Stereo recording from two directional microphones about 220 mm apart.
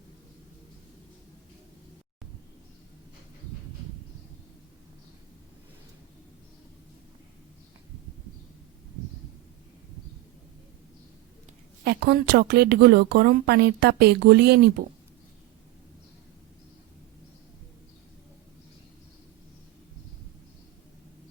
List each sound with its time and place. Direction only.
11.9 s speech: 45° right (ahead or behind)